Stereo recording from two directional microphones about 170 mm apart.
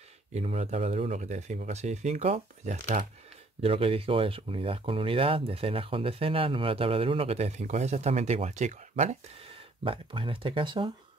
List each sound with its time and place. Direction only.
0.3 s speech: 40° right (ahead or behind)